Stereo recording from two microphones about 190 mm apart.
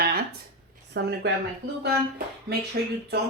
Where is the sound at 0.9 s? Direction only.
60° right (ahead or behind).